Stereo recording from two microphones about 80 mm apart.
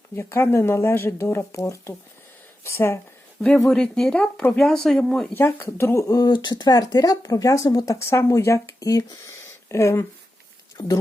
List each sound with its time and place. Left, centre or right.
0.2 s speech: left
3.7 s speech: centre
5.3 s speech: left
6.3 s speech: left
9.6 s speech: left